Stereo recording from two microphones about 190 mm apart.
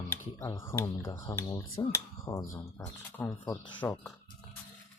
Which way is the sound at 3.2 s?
20° left (ahead or behind).